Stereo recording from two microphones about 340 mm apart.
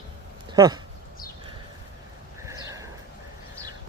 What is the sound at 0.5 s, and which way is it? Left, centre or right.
Speech, centre.